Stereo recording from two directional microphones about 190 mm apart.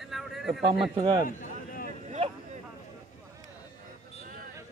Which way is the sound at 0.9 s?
25° right (ahead or behind).